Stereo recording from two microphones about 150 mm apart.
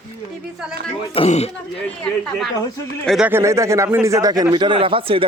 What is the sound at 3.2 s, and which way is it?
Speech, 15° right (ahead or behind).